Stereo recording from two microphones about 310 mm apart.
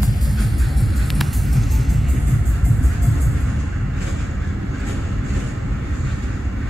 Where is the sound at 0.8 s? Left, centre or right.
Centre.